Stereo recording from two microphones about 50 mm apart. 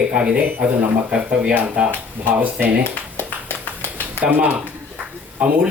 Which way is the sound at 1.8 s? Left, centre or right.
Right.